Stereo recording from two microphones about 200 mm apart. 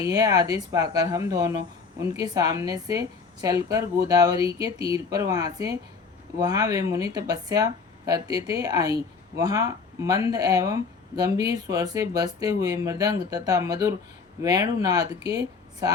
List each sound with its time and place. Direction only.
0.0 s a woman's voice: 15° right (ahead or behind)